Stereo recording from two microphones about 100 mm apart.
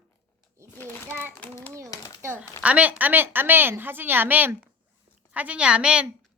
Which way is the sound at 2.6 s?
15° right (ahead or behind).